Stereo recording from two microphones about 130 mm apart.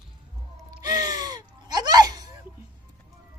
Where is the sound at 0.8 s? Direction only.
30° right (ahead or behind).